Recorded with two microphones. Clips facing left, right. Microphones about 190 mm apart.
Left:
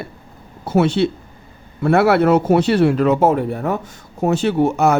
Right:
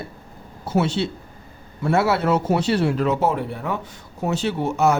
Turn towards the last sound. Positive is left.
turn(degrees=55)  # may be behind; listen again after turning